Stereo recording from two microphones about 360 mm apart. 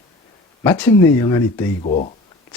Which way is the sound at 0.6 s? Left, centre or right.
Centre.